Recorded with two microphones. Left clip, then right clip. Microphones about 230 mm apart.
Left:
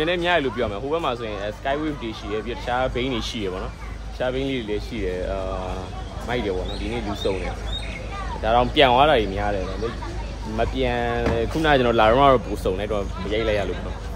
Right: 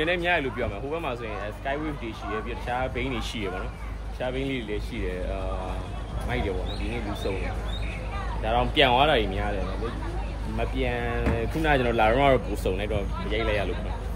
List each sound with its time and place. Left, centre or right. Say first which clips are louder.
0.0 s speech: left 4 dB; centre
6.2 s speech: left 5 dB; centre
8.5 s speech: left 5 dB; centre
10.6 s speech: left 6 dB; centre